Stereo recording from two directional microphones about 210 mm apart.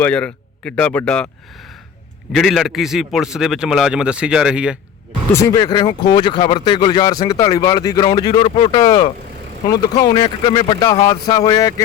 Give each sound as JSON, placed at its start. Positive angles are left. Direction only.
{"t": 0.0, "sound": "a man's voice", "side_deg": 5}
{"t": 2.3, "sound": "a man's voice", "side_deg": 0}
{"t": 5.3, "sound": "speech", "side_deg": 15}